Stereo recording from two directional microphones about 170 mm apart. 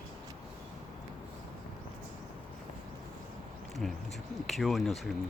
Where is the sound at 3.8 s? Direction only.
5° left (ahead or behind).